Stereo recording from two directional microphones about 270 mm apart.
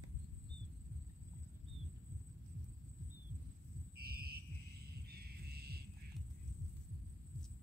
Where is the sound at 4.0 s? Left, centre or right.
Right.